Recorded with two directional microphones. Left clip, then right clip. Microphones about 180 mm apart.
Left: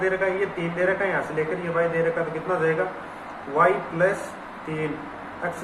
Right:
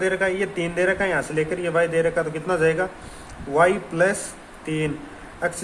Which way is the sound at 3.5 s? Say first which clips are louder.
Right 2 dB; 65° right (ahead or behind).